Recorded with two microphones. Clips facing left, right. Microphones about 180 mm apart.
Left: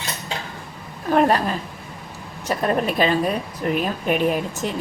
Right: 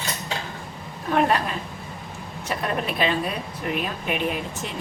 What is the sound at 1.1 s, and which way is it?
A woman's voice, 40° left (ahead or behind).